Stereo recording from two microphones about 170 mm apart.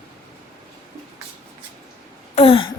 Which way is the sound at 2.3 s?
35° left (ahead or behind).